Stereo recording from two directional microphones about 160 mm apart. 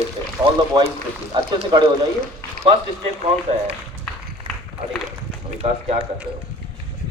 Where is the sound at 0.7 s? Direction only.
25° right (ahead or behind).